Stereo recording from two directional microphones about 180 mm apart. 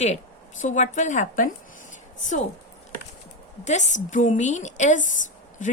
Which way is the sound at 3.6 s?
40° left (ahead or behind).